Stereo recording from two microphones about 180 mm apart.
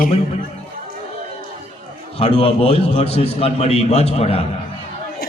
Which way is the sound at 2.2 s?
35° left (ahead or behind).